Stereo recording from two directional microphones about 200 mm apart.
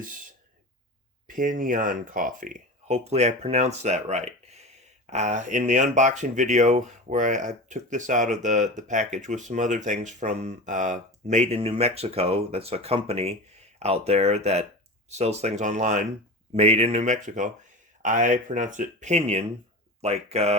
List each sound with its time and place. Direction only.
1.3 s speech: 40° right (ahead or behind)